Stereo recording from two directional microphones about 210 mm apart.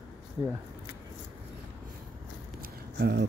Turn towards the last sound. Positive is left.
turn(degrees=-50)  # may be behind; listen again after turning